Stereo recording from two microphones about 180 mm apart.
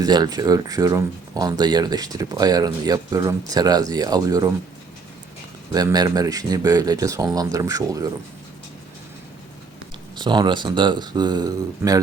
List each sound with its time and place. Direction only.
0.0 s speech: 20° right (ahead or behind)
5.7 s speech: 20° right (ahead or behind)
10.2 s speech: 25° right (ahead or behind)